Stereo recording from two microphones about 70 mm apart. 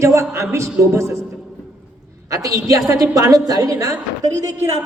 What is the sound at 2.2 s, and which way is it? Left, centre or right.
Speech, right.